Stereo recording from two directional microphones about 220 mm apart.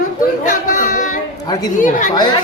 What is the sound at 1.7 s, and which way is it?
Chatter, 35° left (ahead or behind).